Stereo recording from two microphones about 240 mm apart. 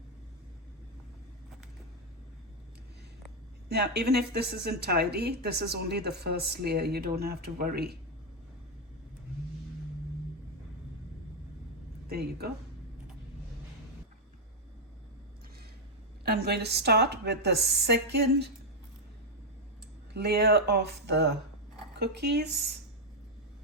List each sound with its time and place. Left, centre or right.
3.7 s speech: right
12.0 s speech: right
16.2 s a woman's voice: right
20.1 s a woman's voice: right